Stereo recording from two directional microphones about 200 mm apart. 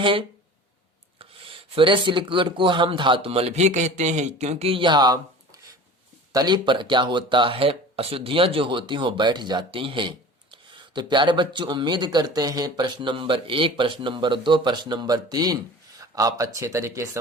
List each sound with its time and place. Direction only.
0.0 s speech: 25° right (ahead or behind)
6.3 s speech: 20° right (ahead or behind)